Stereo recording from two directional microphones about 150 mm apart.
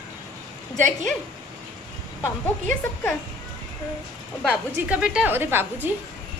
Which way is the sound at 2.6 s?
15° left (ahead or behind).